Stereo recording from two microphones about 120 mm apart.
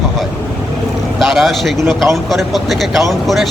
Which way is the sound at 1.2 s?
Centre (ahead or behind).